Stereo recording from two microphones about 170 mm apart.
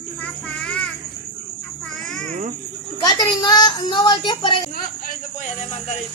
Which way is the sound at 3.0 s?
25° left (ahead or behind).